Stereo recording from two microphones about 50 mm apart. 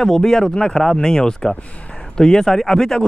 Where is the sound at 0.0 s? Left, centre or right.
Centre.